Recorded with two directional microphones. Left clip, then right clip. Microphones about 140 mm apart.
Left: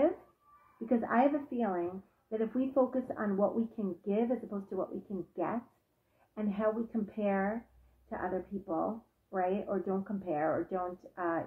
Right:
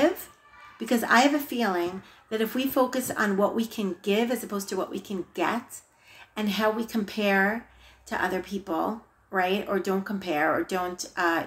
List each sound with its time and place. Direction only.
0.8 s a woman's voice: 15° right (ahead or behind)